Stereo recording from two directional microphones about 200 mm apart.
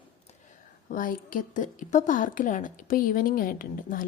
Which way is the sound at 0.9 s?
40° left (ahead or behind).